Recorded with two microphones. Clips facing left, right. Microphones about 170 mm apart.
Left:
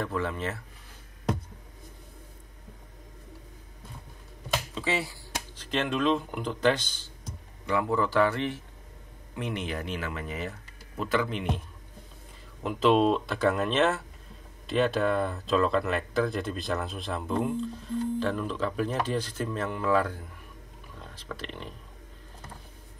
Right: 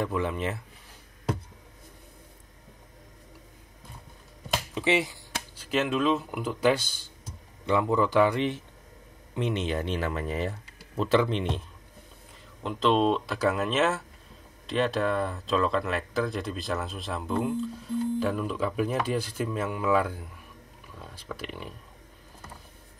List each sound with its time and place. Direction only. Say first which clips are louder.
0.0 s speech: right 2 dB; 15° right (ahead or behind)
4.7 s a man's voice: right 6 dB; 20° right (ahead or behind)
5.6 s speech: right 2 dB; 5° right (ahead or behind)
7.6 s a man's voice: right 3 dB; 20° right (ahead or behind)
12.6 s speech: left 1 dB; 5° left (ahead or behind); by 21.7 s 10° right (ahead or behind)